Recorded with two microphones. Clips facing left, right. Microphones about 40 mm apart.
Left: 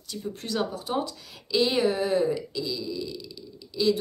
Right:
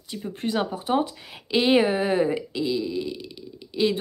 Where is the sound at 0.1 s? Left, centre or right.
Right.